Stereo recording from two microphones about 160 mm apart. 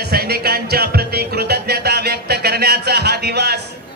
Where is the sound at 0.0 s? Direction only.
75° right (ahead or behind).